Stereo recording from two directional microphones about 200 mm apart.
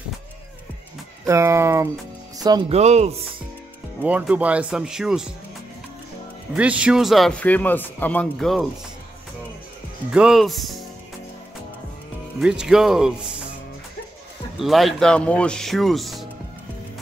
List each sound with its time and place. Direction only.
1.2 s speech: 15° right (ahead or behind)
2.7 s speech: 35° right (ahead or behind)
4.0 s speech: 5° right (ahead or behind)
6.5 s speech: 5° right (ahead or behind)
10.1 s speech: centre (ahead or behind)
12.4 s speech: 5° right (ahead or behind)
14.6 s speech: centre (ahead or behind)